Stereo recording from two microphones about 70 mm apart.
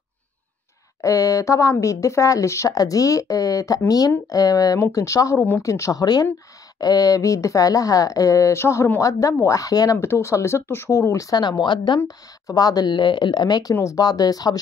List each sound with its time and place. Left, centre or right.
1.0 s speech: left
2.7 s speech: left
6.8 s speech: left
9.4 s speech: left
9.9 s speech: left
11.3 s speech: left
12.4 s speech: left